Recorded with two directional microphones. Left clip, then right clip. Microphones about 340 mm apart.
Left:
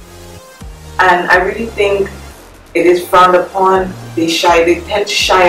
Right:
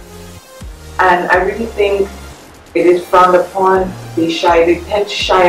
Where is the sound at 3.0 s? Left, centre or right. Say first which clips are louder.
Left 2 dB; centre.